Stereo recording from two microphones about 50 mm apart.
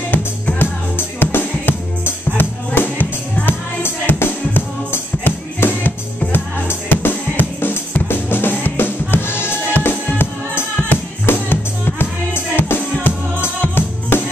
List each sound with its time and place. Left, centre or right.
0.1 s music: left